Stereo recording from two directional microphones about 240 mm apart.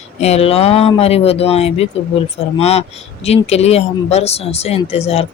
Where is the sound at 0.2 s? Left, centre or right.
Left.